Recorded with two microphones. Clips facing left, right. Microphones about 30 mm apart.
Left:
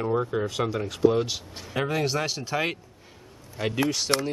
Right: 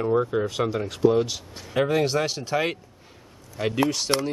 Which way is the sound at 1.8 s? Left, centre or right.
Centre.